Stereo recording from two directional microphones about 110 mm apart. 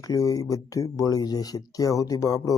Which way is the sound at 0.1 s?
30° left (ahead or behind).